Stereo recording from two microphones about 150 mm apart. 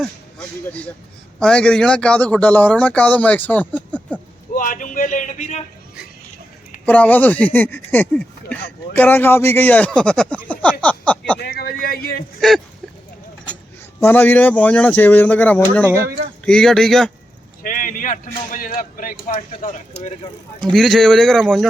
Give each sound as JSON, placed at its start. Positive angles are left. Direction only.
{"t": 0.0, "sound": "a sound", "side_deg": 5}
{"t": 1.4, "sound": "a man's voice", "side_deg": 5}
{"t": 4.5, "sound": "a man's voice", "side_deg": 65}
{"t": 6.8, "sound": "a man's voice", "side_deg": 10}
{"t": 11.3, "sound": "a sound", "side_deg": 90}
{"t": 14.0, "sound": "a man's voice", "side_deg": 10}
{"t": 17.6, "sound": "a man's voice", "side_deg": 65}
{"t": 19.9, "sound": "vehicle", "side_deg": 50}
{"t": 20.6, "sound": "speech", "side_deg": 5}